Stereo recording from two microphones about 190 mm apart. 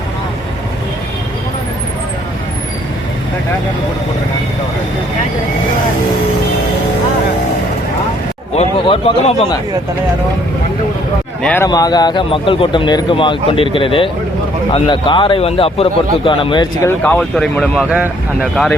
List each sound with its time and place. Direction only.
8.5 s speech: 30° left (ahead or behind)
11.4 s speech: 10° left (ahead or behind)
11.7 s speech: 20° left (ahead or behind)
16.8 s speech: 10° left (ahead or behind); by 18.1 s 5° right (ahead or behind)